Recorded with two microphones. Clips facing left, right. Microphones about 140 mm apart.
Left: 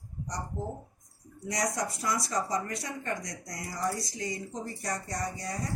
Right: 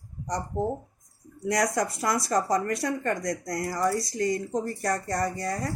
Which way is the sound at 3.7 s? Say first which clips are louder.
Right 5 dB; 65° right (ahead or behind).